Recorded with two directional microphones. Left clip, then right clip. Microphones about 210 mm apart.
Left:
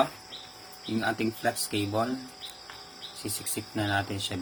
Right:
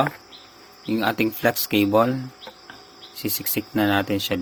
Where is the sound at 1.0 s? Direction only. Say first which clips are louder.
Right 8 dB; 55° right (ahead or behind).